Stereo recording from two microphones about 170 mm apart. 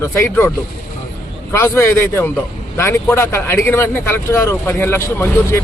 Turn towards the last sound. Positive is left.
turn(degrees=15)  # may be behind; listen again after turning